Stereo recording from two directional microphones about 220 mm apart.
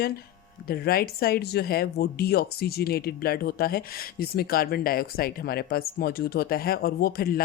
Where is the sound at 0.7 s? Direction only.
45° left (ahead or behind).